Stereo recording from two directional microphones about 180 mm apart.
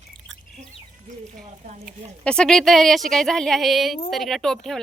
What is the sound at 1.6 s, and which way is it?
Speech, 45° right (ahead or behind).